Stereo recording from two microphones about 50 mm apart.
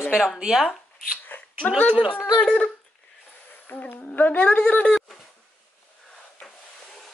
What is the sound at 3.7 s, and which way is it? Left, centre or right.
Speech, left.